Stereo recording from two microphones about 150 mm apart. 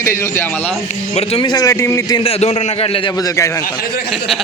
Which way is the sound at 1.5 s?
25° left (ahead or behind).